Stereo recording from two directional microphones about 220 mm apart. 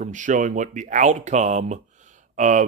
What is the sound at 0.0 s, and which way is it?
Speech, 35° right (ahead or behind).